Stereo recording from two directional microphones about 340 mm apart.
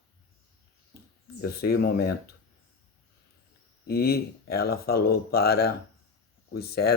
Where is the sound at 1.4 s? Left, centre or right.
Left.